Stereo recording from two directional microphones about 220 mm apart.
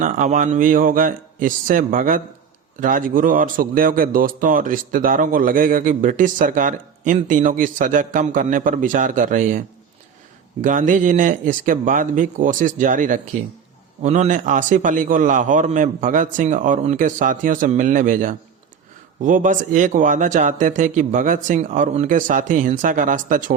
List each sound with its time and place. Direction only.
0.0 s a man's voice: 35° right (ahead or behind)